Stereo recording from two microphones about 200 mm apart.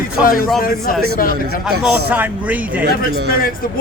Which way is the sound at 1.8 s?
10° right (ahead or behind).